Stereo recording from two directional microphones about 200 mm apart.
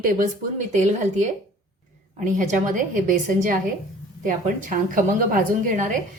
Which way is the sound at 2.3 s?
40° right (ahead or behind).